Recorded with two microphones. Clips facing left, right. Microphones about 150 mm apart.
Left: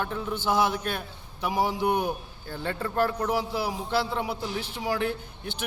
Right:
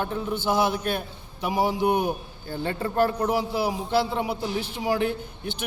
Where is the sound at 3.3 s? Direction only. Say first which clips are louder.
Right 3 dB; 10° right (ahead or behind).